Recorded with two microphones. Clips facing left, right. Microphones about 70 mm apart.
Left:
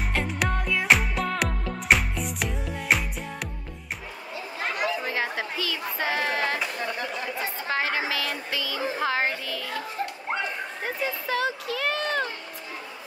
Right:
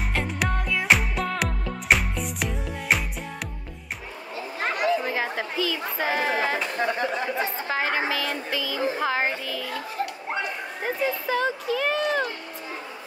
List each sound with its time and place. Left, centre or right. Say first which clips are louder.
0.1 s music: even; centre
5.0 s a sound: right 1 dB; centre
6.8 s speech: right 5 dB; right
7.6 s a woman's voice: left 1 dB; centre